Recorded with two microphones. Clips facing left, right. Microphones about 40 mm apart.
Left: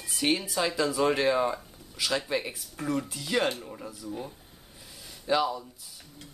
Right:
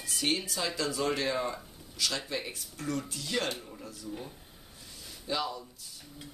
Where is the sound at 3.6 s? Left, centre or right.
Left.